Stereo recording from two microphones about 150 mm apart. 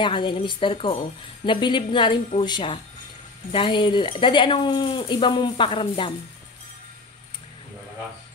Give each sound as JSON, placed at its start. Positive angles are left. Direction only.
{"t": 0.0, "sound": "speech", "side_deg": 30}